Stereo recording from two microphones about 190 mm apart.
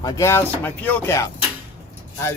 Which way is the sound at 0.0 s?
15° left (ahead or behind).